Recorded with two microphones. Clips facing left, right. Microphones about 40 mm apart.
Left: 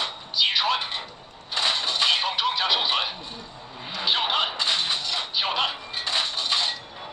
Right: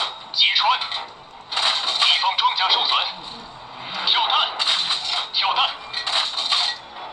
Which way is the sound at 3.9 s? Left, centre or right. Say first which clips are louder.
Right 4 dB; centre.